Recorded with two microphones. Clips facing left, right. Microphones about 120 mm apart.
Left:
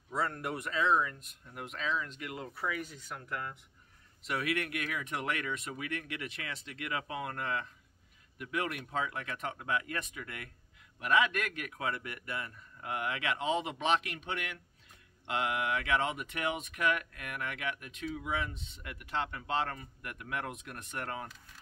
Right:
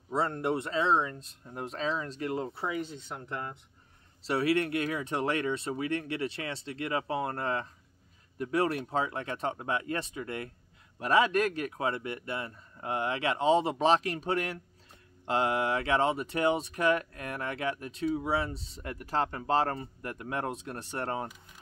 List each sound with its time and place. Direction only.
0.1 s speech: 25° right (ahead or behind)